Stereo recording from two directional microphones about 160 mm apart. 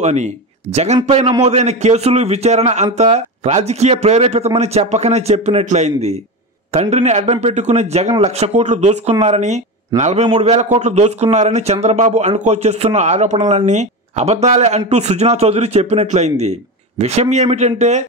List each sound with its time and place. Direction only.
0.0 s a man's voice: 45° right (ahead or behind)